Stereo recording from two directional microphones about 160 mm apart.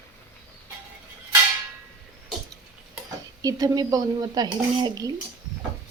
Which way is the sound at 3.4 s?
20° right (ahead or behind).